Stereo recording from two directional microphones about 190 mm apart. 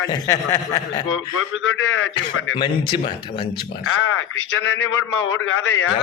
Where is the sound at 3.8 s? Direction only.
90° left.